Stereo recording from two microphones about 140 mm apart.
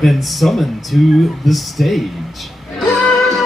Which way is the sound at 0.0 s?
Centre (ahead or behind).